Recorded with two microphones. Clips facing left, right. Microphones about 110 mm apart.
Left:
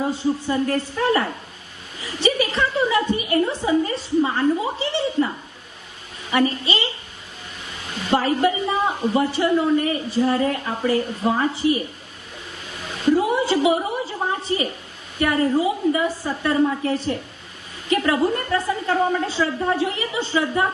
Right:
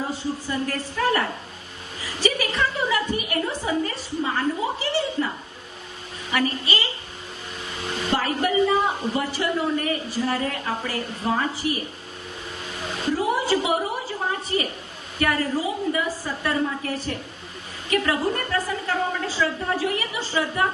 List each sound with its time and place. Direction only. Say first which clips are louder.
0.1 s a woman's voice: left 6 dB; 25° left (ahead or behind)
6.3 s a woman's voice: left 4 dB; 25° left (ahead or behind)
8.1 s a woman's voice: left 4 dB; 25° left (ahead or behind)
13.1 s a sound: left 4 dB; 25° left (ahead or behind)
14.4 s a woman's voice: left 2 dB; 25° left (ahead or behind)